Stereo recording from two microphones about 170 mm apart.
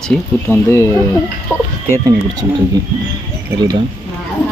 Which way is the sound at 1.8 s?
20° right (ahead or behind).